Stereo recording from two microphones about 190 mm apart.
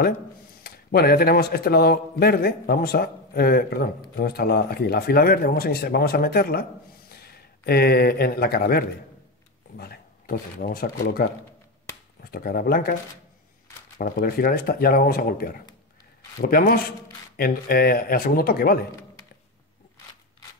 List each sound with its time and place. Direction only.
0.7 s a man's voice: 55° left (ahead or behind)
13.9 s a man's voice: 45° left (ahead or behind)